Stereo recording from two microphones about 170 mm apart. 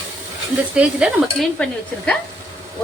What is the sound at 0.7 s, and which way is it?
Speech, 5° right (ahead or behind).